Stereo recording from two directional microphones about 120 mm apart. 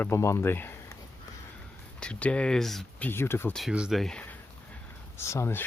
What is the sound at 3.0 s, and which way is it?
Speech, 20° left (ahead or behind).